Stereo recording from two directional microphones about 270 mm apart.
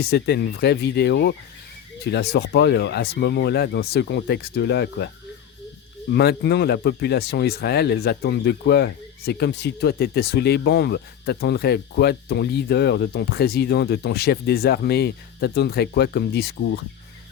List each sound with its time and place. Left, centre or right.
0.0 s speech: left
6.1 s speech: left